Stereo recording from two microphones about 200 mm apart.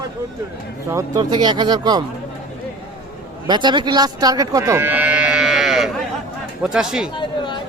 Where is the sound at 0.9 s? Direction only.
15° right (ahead or behind).